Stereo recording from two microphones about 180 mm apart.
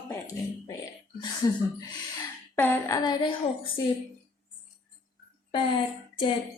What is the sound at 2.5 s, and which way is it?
Speech, 10° left (ahead or behind).